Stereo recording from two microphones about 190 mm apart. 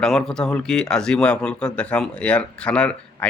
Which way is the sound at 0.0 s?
5° left (ahead or behind).